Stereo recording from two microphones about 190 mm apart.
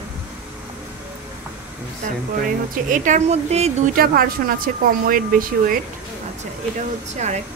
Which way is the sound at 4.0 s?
50° right (ahead or behind).